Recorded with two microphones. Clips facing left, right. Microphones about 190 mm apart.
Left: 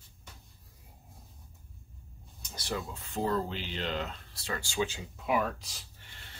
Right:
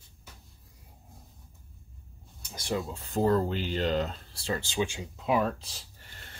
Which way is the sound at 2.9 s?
40° right (ahead or behind).